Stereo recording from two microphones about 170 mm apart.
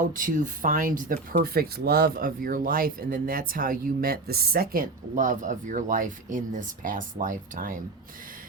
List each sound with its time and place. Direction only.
0.1 s speech: 50° right (ahead or behind)